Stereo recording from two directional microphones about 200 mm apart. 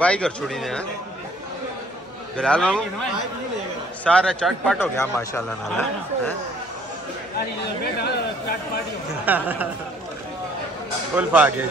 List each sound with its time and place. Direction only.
0.0 s a man's voice: 5° left (ahead or behind)
2.3 s a man's voice: 5° left (ahead or behind)
7.3 s a man's voice: 50° left (ahead or behind)
9.2 s speech: 10° right (ahead or behind)
11.1 s speech: 5° right (ahead or behind)